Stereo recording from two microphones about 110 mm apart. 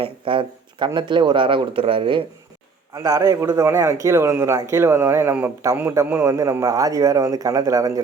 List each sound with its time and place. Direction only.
0.0 s speech: 50° right (ahead or behind)
2.9 s a man's voice: 30° right (ahead or behind)
6.5 s speech: 30° right (ahead or behind)